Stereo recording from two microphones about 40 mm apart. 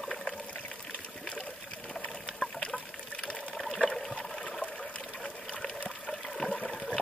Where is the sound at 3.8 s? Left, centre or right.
Centre.